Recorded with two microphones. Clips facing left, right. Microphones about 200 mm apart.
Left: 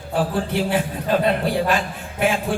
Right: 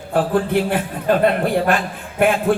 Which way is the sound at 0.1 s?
55° right (ahead or behind).